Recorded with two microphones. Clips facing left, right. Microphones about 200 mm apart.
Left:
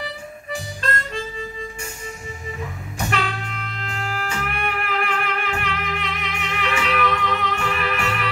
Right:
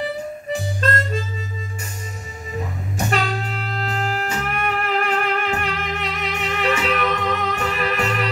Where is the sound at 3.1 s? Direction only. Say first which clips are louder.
Right 3 dB; 35° right (ahead or behind).